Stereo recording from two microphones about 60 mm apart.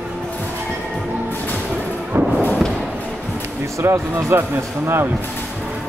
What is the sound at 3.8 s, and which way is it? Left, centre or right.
Speech, right.